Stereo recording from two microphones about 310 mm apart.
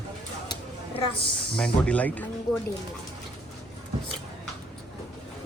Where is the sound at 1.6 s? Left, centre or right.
Centre.